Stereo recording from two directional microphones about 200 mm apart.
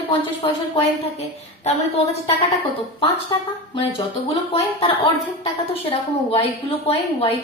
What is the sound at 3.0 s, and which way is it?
A woman's voice, 25° left (ahead or behind).